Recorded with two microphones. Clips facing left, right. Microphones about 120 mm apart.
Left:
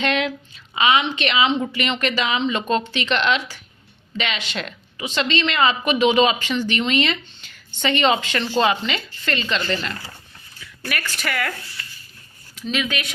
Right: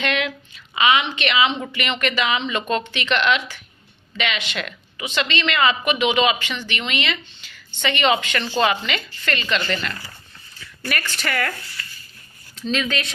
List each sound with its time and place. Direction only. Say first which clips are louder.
0.0 s a sound: left 2 dB; 30° left (ahead or behind)
0.8 s a woman's voice: even; 30° left (ahead or behind)
10.8 s speech: right 1 dB; 5° left (ahead or behind)
12.5 s speech: right 1 dB; 10° left (ahead or behind)